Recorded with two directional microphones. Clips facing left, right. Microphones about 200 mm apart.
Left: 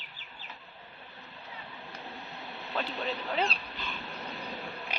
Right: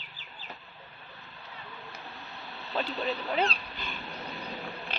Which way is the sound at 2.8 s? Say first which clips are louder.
Right 3 dB; centre (ahead or behind).